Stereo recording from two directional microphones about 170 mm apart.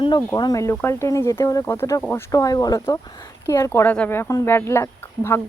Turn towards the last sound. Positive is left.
turn(degrees=15)  # may be behind; listen again after turning